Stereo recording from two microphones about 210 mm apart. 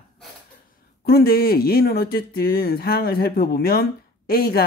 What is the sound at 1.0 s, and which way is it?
Speech, 50° left (ahead or behind).